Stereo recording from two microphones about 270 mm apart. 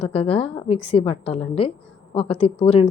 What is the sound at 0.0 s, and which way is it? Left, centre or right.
A woman's voice, left.